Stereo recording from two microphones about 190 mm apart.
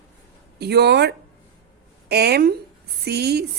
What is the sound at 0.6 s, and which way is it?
A woman's voice, 60° right (ahead or behind).